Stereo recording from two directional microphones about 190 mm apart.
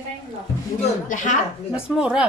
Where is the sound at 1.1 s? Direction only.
40° left (ahead or behind).